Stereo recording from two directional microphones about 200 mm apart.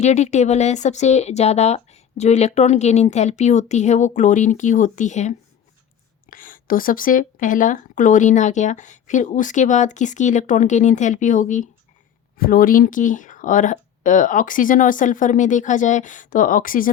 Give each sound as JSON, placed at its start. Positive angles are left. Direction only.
{"t": 0.0, "sound": "speech", "side_deg": 35}